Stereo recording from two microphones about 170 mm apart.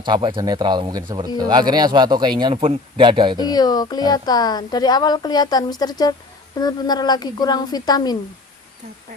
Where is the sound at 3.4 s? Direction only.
25° left (ahead or behind).